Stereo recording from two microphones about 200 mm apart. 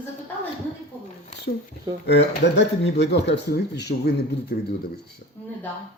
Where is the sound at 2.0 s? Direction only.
60° left (ahead or behind).